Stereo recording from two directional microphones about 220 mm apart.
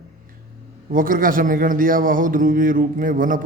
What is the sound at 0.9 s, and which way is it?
A man's voice, 40° right (ahead or behind).